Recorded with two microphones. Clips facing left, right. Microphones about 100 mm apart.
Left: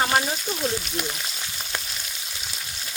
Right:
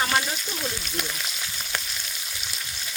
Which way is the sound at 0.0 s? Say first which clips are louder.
Left 3 dB; 30° left (ahead or behind).